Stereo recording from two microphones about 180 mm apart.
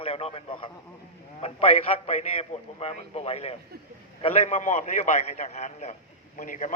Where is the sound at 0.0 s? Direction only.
35° left (ahead or behind).